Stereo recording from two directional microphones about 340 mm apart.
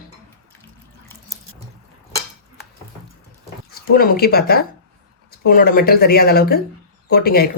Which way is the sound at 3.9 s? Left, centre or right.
Left.